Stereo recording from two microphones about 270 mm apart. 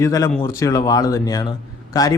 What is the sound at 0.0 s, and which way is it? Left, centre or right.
Speech, centre.